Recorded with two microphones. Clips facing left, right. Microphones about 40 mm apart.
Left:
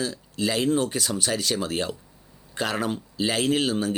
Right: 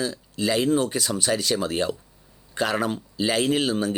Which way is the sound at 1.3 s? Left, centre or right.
Centre.